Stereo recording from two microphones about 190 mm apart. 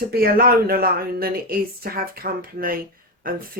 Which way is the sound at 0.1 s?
50° right (ahead or behind).